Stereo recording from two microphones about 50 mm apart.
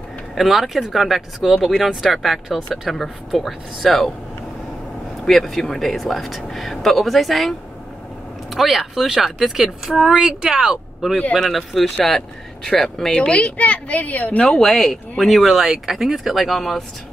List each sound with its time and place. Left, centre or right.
0.4 s speech: centre
5.2 s speech: centre
8.5 s speech: centre
11.3 s speech: centre
13.2 s speech: left
14.6 s speech: centre
15.4 s speech: centre